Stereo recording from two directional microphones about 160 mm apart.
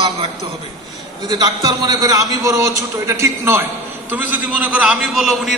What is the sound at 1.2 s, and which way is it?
A man's voice, 25° right (ahead or behind).